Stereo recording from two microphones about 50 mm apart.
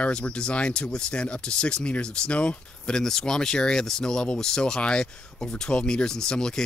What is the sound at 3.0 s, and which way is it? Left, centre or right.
Speech, centre.